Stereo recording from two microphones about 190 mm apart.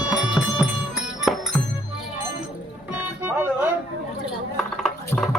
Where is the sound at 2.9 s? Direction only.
10° right (ahead or behind).